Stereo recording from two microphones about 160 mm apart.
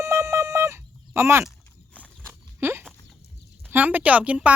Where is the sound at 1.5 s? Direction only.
10° left (ahead or behind).